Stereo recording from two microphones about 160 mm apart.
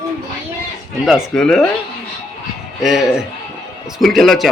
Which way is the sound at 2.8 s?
Centre (ahead or behind).